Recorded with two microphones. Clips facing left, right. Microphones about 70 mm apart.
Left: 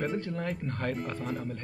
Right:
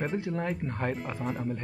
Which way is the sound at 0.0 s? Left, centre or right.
Centre.